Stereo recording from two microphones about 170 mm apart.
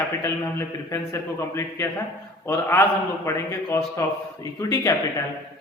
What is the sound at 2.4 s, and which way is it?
A man's voice, 15° left (ahead or behind).